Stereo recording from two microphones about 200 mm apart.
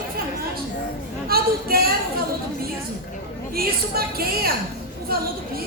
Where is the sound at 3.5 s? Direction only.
50° right (ahead or behind).